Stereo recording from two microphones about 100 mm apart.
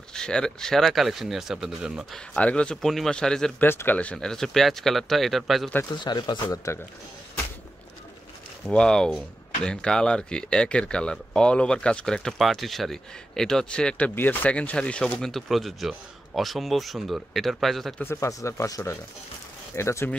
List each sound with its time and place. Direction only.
0.1 s speech: 5° left (ahead or behind)
2.1 s speech: 10° left (ahead or behind)
3.6 s speech: 20° left (ahead or behind); by 5.7 s centre (ahead or behind)
5.9 s speech: 45° left (ahead or behind)
8.6 s speech: 5° left (ahead or behind)
18.0 s speech: 25° left (ahead or behind)